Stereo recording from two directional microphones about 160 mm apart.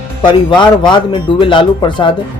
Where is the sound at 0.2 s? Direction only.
30° left (ahead or behind).